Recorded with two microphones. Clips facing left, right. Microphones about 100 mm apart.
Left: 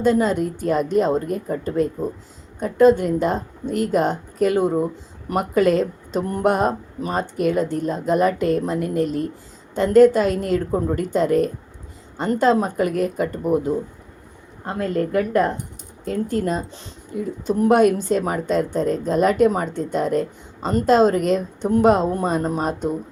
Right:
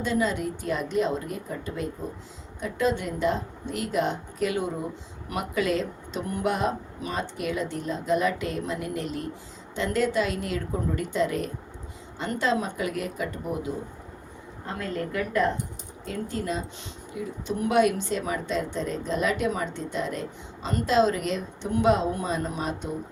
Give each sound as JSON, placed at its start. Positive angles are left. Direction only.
{"t": 0.0, "sound": "a woman's voice", "side_deg": 45}